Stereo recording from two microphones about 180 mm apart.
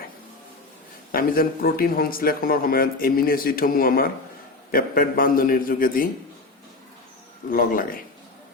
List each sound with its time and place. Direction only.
1.1 s a man's voice: 55° left (ahead or behind)
7.5 s a man's voice: 50° left (ahead or behind)